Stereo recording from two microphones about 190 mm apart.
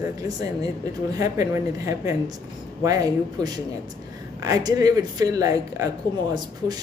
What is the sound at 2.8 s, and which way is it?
Speech, 20° right (ahead or behind).